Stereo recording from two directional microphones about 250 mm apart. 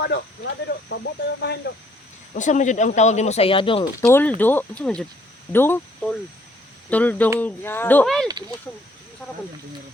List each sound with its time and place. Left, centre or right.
0.0 s speech: left
2.3 s speech: left
4.0 s speech: centre